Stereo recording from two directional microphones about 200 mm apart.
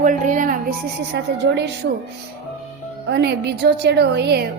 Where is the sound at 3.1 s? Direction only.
55° right (ahead or behind).